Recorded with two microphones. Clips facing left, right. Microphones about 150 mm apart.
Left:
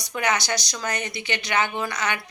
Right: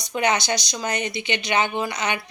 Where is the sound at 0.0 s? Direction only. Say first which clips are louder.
Right 3 dB; 20° right (ahead or behind).